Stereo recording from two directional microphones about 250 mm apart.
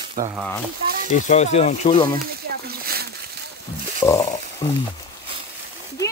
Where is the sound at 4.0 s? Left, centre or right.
Centre.